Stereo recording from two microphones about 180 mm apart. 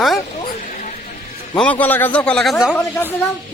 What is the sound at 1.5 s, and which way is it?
A man's voice, 10° left (ahead or behind).